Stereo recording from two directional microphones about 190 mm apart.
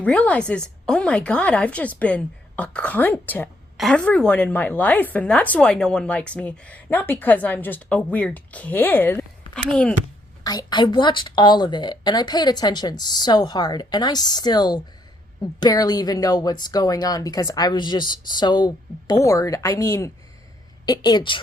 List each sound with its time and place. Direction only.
0.0 s a woman's voice: 5° left (ahead or behind)
10.4 s speech: 20° left (ahead or behind)